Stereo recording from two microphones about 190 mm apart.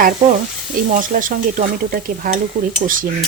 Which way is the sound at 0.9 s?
45° right (ahead or behind).